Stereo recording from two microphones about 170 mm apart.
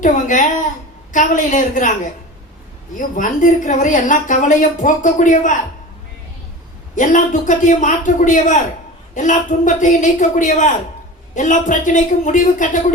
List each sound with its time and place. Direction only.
0.0 s a woman's voice: 50° left (ahead or behind)
3.0 s a woman's voice: 50° left (ahead or behind)
6.9 s a woman's voice: 50° left (ahead or behind)